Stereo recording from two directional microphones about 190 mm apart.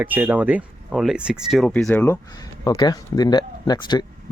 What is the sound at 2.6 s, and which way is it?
Speech, 20° left (ahead or behind).